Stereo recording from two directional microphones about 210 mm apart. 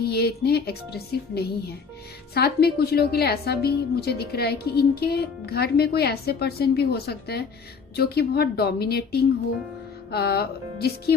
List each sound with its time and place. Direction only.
0.0 s a woman's voice: 50° left (ahead or behind)